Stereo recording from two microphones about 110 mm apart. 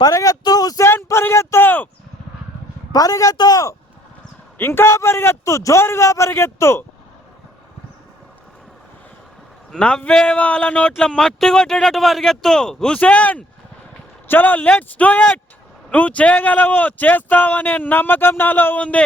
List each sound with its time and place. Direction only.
0.0 s speech: 30° left (ahead or behind)
0.9 s speech: 20° left (ahead or behind)
2.9 s a man's voice: 35° left (ahead or behind)
4.5 s a man's voice: 20° left (ahead or behind)
9.7 s speech: 10° left (ahead or behind)